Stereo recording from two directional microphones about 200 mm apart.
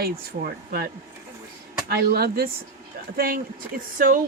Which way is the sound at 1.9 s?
50° right (ahead or behind).